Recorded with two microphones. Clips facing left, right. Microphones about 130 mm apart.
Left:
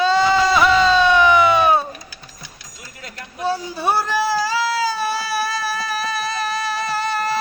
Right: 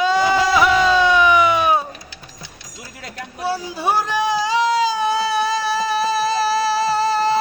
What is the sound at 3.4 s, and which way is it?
Baby cry, 10° right (ahead or behind).